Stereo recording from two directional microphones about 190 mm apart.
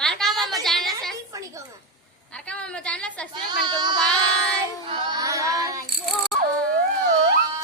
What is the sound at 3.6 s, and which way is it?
Child singing, 20° right (ahead or behind).